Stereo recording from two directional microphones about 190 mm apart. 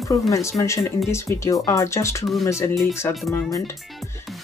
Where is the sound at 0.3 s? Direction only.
15° left (ahead or behind).